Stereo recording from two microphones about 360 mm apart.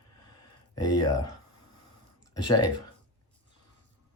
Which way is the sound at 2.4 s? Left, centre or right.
Left.